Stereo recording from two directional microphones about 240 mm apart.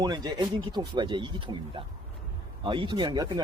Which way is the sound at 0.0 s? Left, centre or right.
Centre.